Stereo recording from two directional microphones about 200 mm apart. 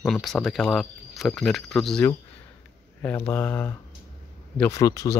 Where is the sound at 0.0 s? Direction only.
Centre (ahead or behind).